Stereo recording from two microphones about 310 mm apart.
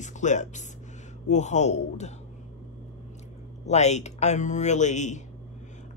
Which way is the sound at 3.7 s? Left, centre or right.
Left.